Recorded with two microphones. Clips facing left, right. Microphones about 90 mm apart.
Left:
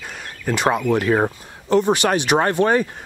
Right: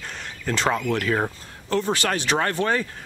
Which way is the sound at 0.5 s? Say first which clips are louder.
Left 4 dB; 15° left (ahead or behind).